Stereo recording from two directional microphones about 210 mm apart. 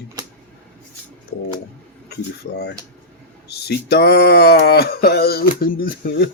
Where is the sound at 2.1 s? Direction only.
50° left (ahead or behind).